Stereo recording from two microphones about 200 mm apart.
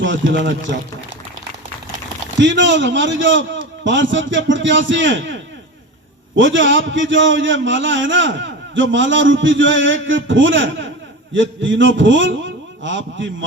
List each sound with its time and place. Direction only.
0.0 s a man's voice: 65° right (ahead or behind)
2.4 s a man's voice: 65° right (ahead or behind)